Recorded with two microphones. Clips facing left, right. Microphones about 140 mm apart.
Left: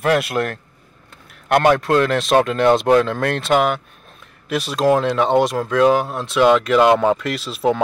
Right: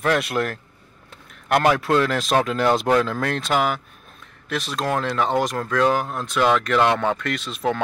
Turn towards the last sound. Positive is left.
turn(degrees=15)  # may be behind; listen again after turning